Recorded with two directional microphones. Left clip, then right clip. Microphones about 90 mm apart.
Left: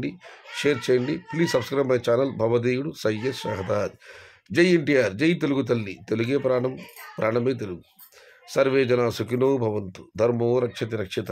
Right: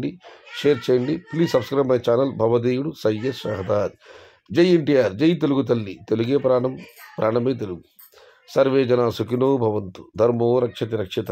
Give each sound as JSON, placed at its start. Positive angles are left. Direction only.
{"t": 0.0, "sound": "speech", "side_deg": -45}